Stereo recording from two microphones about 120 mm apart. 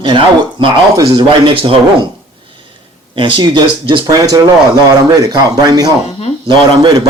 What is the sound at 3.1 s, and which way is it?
Speech, 45° right (ahead or behind).